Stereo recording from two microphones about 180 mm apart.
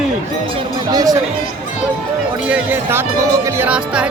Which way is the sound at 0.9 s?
20° right (ahead or behind).